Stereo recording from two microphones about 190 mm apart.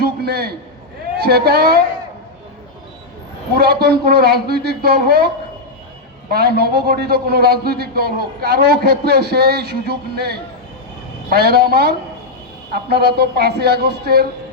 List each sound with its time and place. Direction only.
0.0 s a sound: 55° right (ahead or behind)
1.2 s a man's voice: 55° right (ahead or behind)
3.5 s a man's voice: 55° right (ahead or behind)
6.3 s a man's voice: 55° right (ahead or behind)